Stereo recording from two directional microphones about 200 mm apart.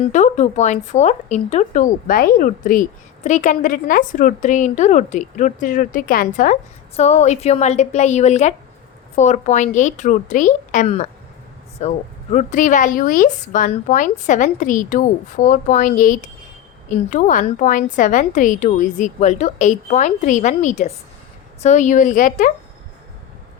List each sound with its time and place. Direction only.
0.1 s a woman's voice: 35° left (ahead or behind)